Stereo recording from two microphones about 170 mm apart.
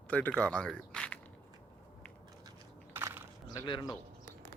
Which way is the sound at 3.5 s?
25° left (ahead or behind).